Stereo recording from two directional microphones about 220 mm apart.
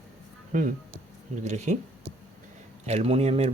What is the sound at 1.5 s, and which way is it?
Speech, 30° right (ahead or behind).